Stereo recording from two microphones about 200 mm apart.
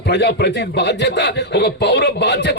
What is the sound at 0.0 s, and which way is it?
Speech, 60° left (ahead or behind).